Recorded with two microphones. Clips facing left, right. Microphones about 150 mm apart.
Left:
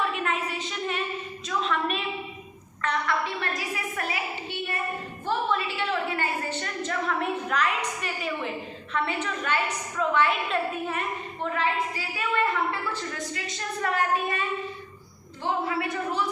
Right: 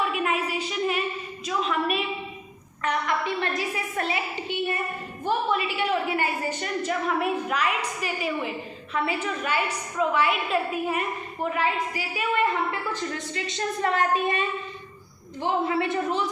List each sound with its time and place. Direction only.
0.2 s a sound: 10° right (ahead or behind)
8.9 s a woman's voice: 10° right (ahead or behind)
15.4 s a woman's voice: 25° right (ahead or behind)